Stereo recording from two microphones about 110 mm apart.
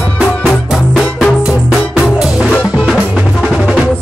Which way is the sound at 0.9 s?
Centre (ahead or behind).